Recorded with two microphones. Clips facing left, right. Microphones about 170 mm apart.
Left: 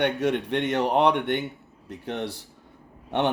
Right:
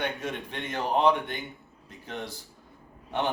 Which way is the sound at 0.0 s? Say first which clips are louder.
Left 9 dB; 75° left (ahead or behind).